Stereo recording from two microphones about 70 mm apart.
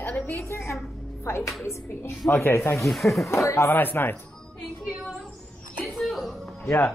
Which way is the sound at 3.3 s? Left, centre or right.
Left.